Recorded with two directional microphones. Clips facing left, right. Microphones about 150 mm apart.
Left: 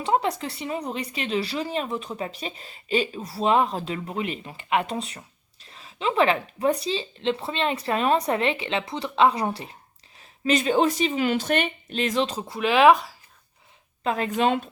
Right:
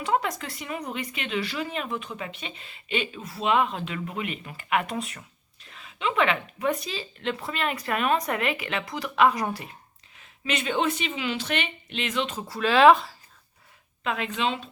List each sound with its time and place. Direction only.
0.0 s speech: 30° left (ahead or behind)
12.4 s speech: 20° left (ahead or behind)
14.0 s speech: 40° left (ahead or behind)